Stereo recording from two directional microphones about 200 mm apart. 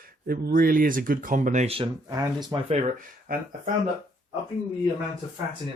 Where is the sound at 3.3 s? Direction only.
45° right (ahead or behind).